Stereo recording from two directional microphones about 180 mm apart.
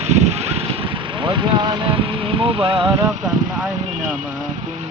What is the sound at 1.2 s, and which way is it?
Speech, 25° right (ahead or behind).